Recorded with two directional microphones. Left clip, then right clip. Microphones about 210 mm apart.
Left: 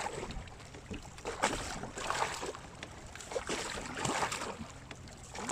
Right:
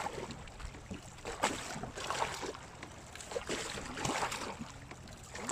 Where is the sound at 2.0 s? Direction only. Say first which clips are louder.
Left 2 dB; 25° left (ahead or behind).